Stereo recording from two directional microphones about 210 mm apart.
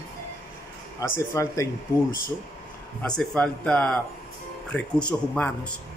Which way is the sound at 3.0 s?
5° left (ahead or behind).